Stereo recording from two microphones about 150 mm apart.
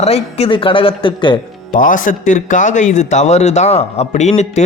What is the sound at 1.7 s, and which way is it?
Speech, 60° left (ahead or behind).